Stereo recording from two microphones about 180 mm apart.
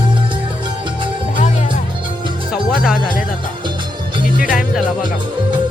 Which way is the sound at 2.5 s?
5° right (ahead or behind).